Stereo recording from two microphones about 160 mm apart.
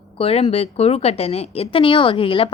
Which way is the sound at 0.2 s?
35° left (ahead or behind).